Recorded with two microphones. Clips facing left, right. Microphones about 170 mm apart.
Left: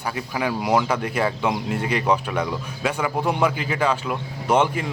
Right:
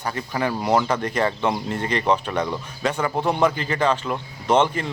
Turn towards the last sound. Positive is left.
turn(degrees=10)  # may be behind; listen again after turning